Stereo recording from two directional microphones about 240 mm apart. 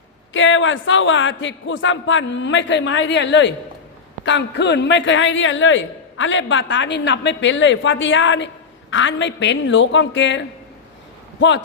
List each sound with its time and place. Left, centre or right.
0.3 s a man's voice: left